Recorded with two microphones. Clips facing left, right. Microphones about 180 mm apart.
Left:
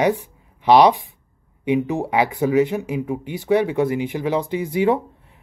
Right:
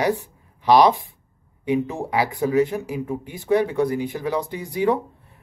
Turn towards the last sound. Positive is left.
turn(degrees=20)  # may be behind; listen again after turning